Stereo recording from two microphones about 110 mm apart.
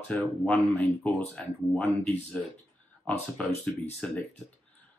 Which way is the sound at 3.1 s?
5° left (ahead or behind).